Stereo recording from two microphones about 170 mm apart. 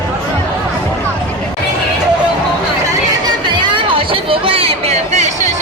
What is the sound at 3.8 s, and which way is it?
Chatter, 30° right (ahead or behind).